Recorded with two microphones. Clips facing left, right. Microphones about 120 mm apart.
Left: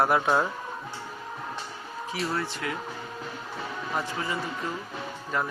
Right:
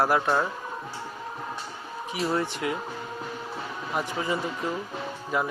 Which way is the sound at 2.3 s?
20° right (ahead or behind).